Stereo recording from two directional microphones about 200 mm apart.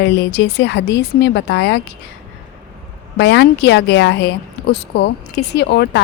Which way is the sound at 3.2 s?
60° left (ahead or behind).